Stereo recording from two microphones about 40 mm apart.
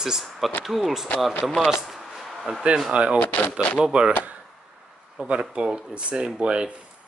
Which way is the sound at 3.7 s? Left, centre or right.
Right.